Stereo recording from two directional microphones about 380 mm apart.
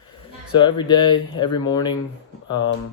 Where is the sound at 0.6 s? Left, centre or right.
Centre.